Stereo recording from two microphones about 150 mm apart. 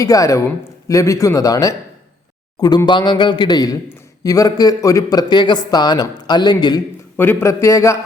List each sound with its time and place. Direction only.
0.0 s a man's voice: 20° left (ahead or behind)
7.2 s a man's voice: 15° left (ahead or behind)